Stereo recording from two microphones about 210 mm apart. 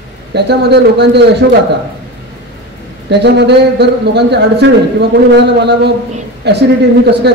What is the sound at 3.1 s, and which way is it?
A man's voice, 55° right (ahead or behind).